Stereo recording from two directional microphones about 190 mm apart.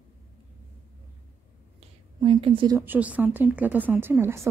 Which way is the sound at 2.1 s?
25° right (ahead or behind).